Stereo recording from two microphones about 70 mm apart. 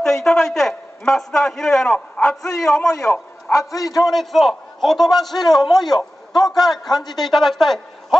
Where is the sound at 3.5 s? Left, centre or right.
Left.